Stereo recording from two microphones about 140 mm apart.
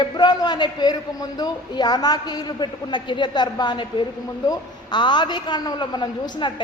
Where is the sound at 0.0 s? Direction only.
30° left (ahead or behind).